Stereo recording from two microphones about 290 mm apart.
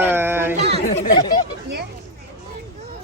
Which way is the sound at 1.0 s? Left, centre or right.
Centre.